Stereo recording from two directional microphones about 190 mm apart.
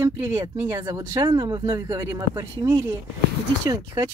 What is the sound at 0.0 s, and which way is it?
A woman's voice, 20° right (ahead or behind).